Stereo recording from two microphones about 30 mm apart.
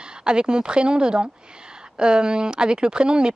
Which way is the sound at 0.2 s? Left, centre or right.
Right.